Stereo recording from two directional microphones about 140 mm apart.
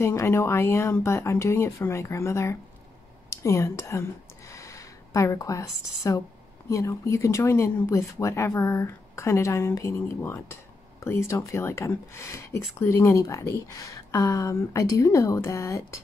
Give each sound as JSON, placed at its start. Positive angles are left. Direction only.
{"t": 0.0, "sound": "speech", "side_deg": 20}
{"t": 3.3, "sound": "a sound", "side_deg": 20}
{"t": 6.0, "sound": "speech", "side_deg": 20}